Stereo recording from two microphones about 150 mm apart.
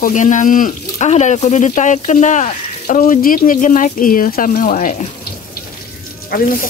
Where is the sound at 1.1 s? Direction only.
50° left (ahead or behind).